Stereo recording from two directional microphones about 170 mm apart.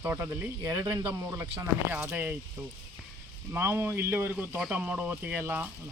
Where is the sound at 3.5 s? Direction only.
15° right (ahead or behind).